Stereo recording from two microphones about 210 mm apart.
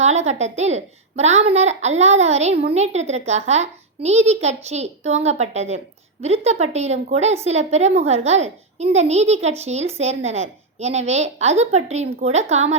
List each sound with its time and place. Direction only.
0.0 s a woman's voice: 30° right (ahead or behind)